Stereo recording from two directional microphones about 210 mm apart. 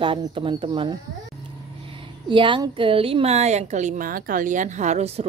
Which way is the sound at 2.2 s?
25° right (ahead or behind).